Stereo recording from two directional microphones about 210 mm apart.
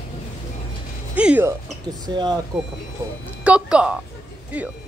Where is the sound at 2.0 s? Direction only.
20° right (ahead or behind).